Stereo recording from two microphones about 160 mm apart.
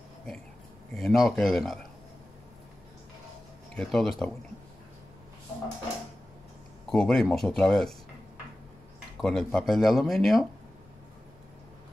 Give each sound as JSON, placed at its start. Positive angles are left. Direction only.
{"t": 0.9, "sound": "speech", "side_deg": 0}
{"t": 3.7, "sound": "speech", "side_deg": 0}
{"t": 6.9, "sound": "speech", "side_deg": 5}
{"t": 9.2, "sound": "speech", "side_deg": 5}